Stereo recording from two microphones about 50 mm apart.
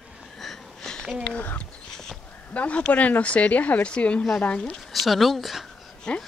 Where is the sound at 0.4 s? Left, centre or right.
Centre.